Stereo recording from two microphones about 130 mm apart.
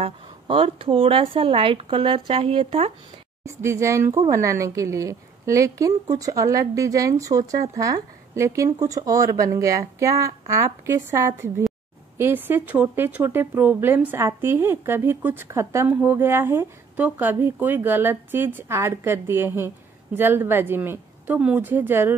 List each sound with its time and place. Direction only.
0.0 s speech: 45° right (ahead or behind)
3.4 s a woman's voice: 20° right (ahead or behind)